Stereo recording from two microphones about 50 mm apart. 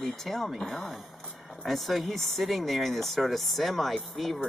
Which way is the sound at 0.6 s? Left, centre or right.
Centre.